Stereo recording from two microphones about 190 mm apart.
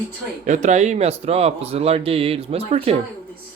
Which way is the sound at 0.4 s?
40° right (ahead or behind).